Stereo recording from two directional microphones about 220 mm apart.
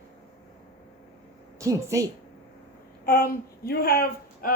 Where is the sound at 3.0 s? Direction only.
40° left (ahead or behind).